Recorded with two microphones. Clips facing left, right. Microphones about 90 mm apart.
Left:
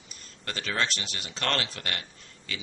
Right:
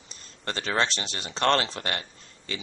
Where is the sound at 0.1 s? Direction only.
25° right (ahead or behind).